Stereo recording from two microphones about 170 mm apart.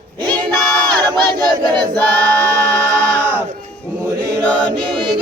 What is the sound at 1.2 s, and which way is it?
Battle cry, 25° right (ahead or behind).